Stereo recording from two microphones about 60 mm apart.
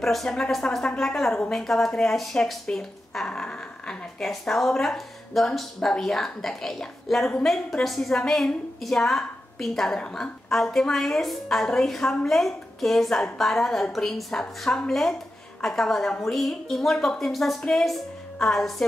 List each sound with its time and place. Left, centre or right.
0.0 s speech: centre
4.3 s a woman's voice: centre